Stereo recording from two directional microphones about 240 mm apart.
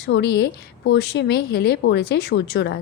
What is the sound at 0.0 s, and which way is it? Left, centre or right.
Speech, left.